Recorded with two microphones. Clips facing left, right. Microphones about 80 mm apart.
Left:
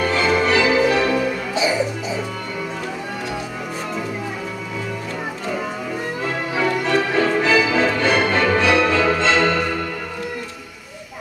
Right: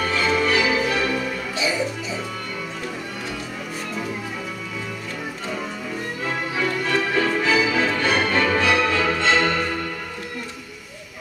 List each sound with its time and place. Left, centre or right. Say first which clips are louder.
0.0 s music: left 3 dB; left
6.5 s music: left 5 dB; left